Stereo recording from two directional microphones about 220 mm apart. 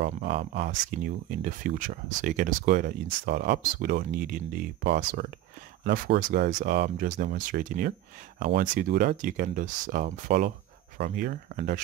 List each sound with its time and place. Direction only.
0.6 s speech: 35° right (ahead or behind)